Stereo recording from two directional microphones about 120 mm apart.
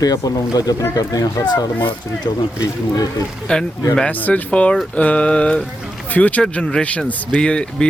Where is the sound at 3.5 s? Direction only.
5° left (ahead or behind).